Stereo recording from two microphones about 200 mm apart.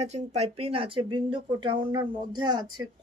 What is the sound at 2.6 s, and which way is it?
Speech, 90° right.